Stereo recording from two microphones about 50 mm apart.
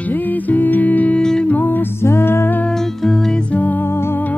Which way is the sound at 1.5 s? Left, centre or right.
Left.